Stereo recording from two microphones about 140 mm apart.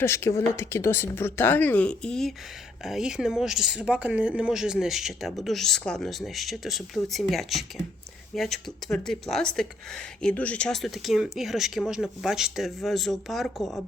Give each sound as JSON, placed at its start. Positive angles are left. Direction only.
{"t": 0.0, "sound": "speech", "side_deg": 20}